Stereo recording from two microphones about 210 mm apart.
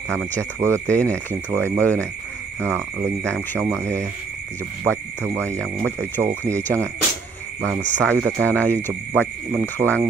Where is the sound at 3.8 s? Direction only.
15° right (ahead or behind).